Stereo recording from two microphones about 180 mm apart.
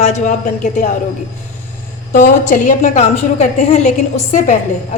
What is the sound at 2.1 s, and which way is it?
A woman's voice, 45° left (ahead or behind).